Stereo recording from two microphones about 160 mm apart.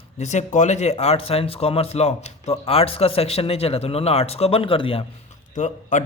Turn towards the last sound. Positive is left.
turn(degrees=50)  # may be behind; listen again after turning